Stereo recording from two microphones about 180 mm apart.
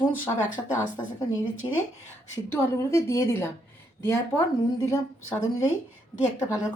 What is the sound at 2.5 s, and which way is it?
Speech, 15° left (ahead or behind).